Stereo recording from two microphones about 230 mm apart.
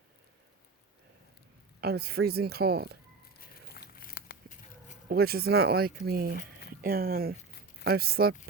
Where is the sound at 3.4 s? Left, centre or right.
Left.